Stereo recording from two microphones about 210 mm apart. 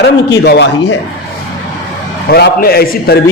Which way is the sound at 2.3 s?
50° left (ahead or behind).